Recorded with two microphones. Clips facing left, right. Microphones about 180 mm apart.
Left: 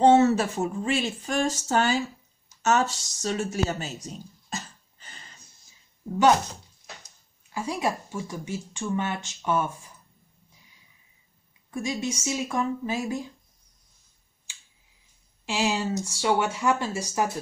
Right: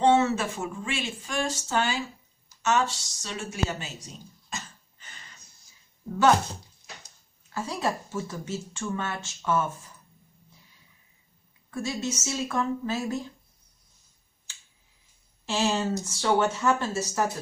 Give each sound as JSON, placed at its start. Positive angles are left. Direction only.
{"t": 0.0, "sound": "a sound", "side_deg": 40}
{"t": 4.5, "sound": "cough", "side_deg": 35}
{"t": 7.4, "sound": "speech", "side_deg": 15}
{"t": 11.7, "sound": "speech", "side_deg": 15}
{"t": 15.4, "sound": "speech", "side_deg": 10}